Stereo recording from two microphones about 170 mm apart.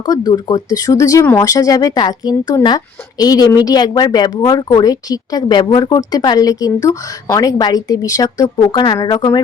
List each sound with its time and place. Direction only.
0.0 s a woman's voice: 20° left (ahead or behind)